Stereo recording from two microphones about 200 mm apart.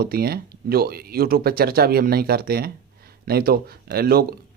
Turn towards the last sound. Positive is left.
turn(degrees=-50)  # may be behind; listen again after turning